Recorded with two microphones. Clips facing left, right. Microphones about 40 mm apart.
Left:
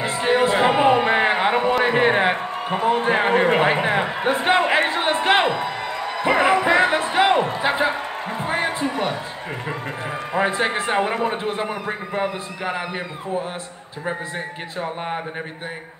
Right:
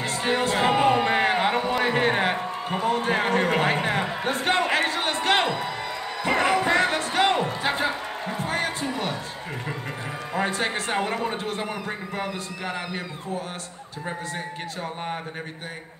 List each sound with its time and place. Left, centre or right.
0.0 s a sound: centre
6.2 s speech: centre
10.3 s a man's voice: centre